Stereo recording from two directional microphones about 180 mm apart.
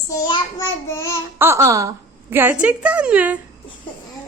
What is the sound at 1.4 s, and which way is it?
Speech, 15° right (ahead or behind).